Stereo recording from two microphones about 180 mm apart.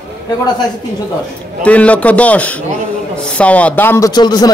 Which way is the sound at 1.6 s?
5° left (ahead or behind).